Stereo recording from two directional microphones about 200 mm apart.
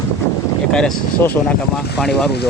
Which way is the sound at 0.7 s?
5° left (ahead or behind).